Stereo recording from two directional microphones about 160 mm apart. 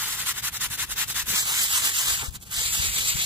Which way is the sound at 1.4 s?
25° right (ahead or behind).